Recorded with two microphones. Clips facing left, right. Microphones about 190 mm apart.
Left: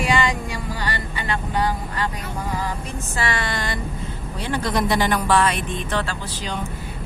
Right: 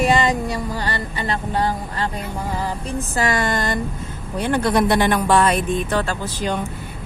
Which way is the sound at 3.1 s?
45° right (ahead or behind).